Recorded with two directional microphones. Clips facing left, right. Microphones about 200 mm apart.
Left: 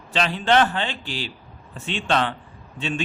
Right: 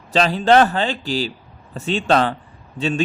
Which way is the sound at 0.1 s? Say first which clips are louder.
Right 6 dB; 40° right (ahead or behind).